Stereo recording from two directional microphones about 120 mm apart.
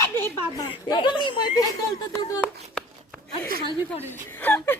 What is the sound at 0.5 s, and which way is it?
Speech, 35° left (ahead or behind).